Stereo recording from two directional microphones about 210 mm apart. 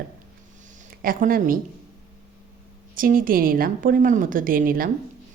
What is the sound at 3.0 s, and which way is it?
A woman's voice, 40° right (ahead or behind).